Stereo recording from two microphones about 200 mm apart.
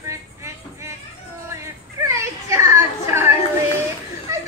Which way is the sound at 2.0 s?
15° right (ahead or behind).